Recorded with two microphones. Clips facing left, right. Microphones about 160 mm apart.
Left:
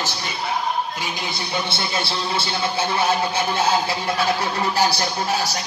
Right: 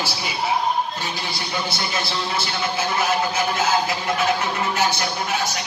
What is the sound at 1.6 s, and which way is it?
A man's voice, 30° left (ahead or behind).